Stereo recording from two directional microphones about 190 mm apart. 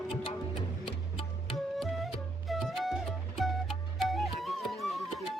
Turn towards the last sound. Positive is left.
turn(degrees=0)  # may be behind; listen again after turning